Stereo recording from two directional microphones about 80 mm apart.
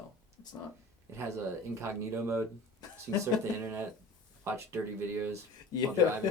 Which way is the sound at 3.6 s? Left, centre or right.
Right.